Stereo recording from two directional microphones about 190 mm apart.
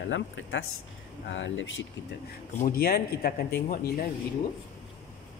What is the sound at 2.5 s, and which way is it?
Speech, 45° left (ahead or behind).